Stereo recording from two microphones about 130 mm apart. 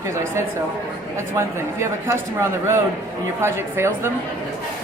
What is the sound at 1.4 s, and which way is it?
Speech, 20° right (ahead or behind).